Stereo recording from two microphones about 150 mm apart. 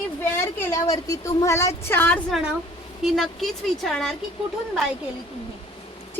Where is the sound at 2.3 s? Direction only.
5° right (ahead or behind).